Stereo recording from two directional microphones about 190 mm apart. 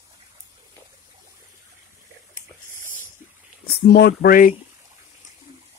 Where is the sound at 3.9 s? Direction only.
55° left (ahead or behind).